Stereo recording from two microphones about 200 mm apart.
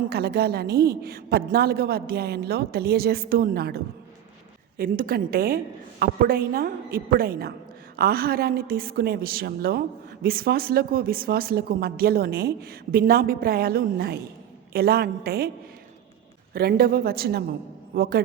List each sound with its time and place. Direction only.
0.1 s speech: 50° right (ahead or behind)
4.8 s speech: 45° right (ahead or behind)
16.6 s a man's voice: 50° right (ahead or behind)